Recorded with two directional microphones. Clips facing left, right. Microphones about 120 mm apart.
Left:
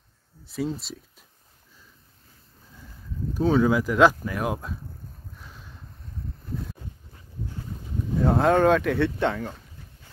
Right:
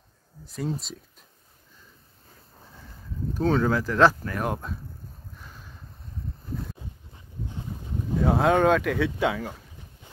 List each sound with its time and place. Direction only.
0.5 s speech: centre (ahead or behind)
3.3 s speech: 5° left (ahead or behind)
5.3 s a sound: centre (ahead or behind)
8.2 s speech: centre (ahead or behind)